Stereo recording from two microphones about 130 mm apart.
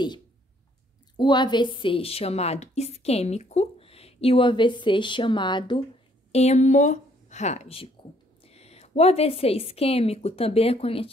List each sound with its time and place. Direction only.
1.1 s a woman's voice: 35° left (ahead or behind)
6.3 s a woman's voice: 60° left (ahead or behind)